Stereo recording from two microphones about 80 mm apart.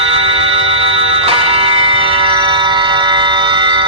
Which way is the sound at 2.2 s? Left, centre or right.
Right.